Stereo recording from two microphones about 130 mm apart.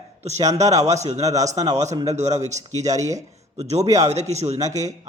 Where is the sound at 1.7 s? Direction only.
60° right (ahead or behind).